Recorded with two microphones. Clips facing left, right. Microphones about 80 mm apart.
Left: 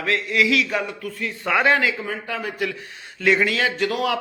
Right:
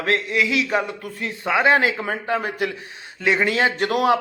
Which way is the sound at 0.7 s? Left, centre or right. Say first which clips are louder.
Right 3 dB; right.